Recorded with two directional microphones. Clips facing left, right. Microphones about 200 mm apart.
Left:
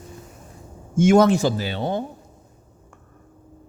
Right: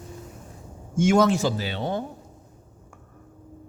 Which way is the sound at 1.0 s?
55° left (ahead or behind).